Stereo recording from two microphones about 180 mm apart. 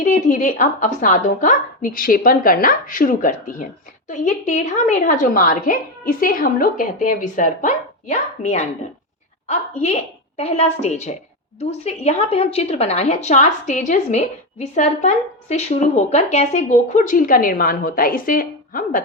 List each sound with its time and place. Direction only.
0.0 s a woman's voice: 45° left (ahead or behind)